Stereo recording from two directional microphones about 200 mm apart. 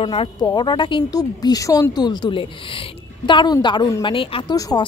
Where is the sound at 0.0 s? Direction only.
25° left (ahead or behind).